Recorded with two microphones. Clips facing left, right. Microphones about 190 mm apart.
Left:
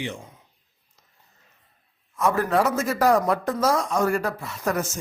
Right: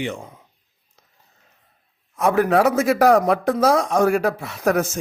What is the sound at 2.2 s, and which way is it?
Speech, 70° right (ahead or behind).